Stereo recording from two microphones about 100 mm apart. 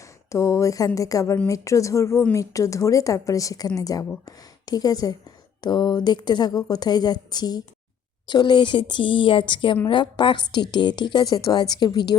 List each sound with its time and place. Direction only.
0.3 s a woman's voice: 30° left (ahead or behind); by 12.1 s 45° left (ahead or behind)